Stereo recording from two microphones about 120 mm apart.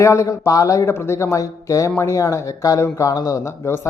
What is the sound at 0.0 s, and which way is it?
Speech, 25° left (ahead or behind).